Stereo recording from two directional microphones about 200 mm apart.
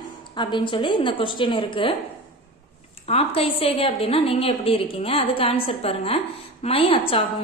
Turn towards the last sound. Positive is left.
turn(degrees=30)  # may be behind; listen again after turning